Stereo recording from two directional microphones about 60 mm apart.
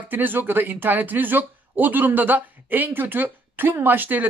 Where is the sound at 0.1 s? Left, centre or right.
Right.